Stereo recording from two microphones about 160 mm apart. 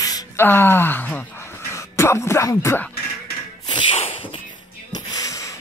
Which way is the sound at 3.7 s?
35° left (ahead or behind).